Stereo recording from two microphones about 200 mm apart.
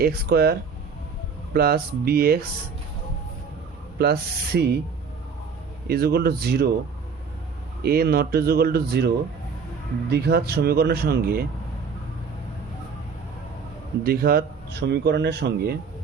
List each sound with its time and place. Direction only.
0.0 s speech: 50° right (ahead or behind)
1.5 s speech: 50° right (ahead or behind)
3.9 s speech: 50° right (ahead or behind)
5.9 s speech: 50° right (ahead or behind)
7.9 s speech: 50° right (ahead or behind)
10.1 s speech: 55° right (ahead or behind)
14.0 s speech: 50° right (ahead or behind)